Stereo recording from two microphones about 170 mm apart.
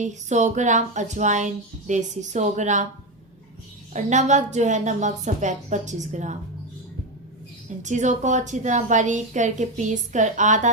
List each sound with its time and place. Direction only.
0.0 s a woman's voice: 45° right (ahead or behind)
3.9 s a woman's voice: 45° right (ahead or behind)
7.8 s a woman's voice: 45° right (ahead or behind)